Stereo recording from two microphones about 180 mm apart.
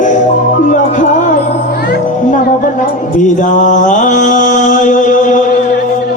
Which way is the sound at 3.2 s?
45° left (ahead or behind).